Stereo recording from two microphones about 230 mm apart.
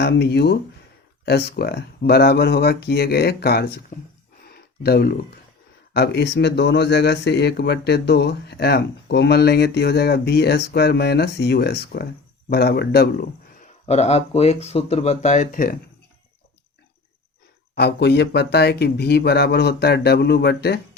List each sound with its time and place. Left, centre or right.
0.0 s speech: left
4.4 s a sound: left
5.9 s speech: left
13.8 s speech: left
17.7 s speech: left